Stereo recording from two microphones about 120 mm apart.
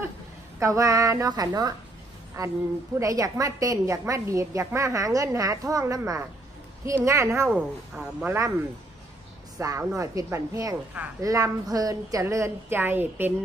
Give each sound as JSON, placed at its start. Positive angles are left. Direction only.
{"t": 0.6, "sound": "a woman's voice", "side_deg": -25}
{"t": 7.4, "sound": "speech", "side_deg": -5}
{"t": 8.3, "sound": "a woman's voice", "side_deg": -25}
{"t": 9.6, "sound": "a woman's voice", "side_deg": -25}